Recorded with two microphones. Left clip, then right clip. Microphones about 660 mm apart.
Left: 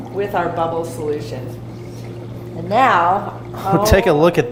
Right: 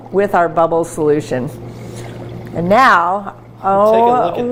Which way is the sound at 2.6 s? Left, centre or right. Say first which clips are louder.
Right 4 dB; right.